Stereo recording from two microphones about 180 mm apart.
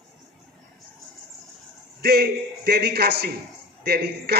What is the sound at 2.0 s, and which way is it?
A man's voice, 60° right (ahead or behind).